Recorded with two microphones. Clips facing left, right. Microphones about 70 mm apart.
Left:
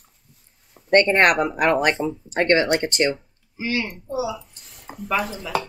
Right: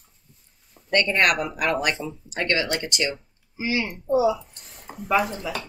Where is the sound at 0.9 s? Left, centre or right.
Left.